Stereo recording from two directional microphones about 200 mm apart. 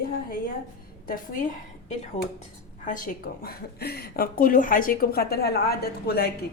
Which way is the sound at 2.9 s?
40° left (ahead or behind).